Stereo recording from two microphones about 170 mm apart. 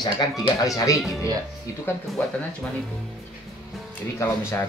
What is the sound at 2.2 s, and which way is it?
Speech, 10° left (ahead or behind).